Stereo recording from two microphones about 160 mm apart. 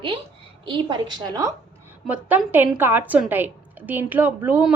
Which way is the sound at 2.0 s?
10° right (ahead or behind).